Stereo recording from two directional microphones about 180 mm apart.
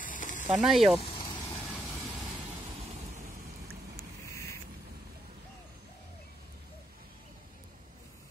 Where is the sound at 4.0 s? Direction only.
15° left (ahead or behind).